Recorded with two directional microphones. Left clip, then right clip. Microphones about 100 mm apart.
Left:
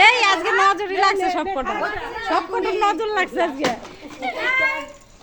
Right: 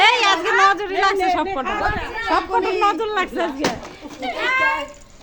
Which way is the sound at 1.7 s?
25° right (ahead or behind).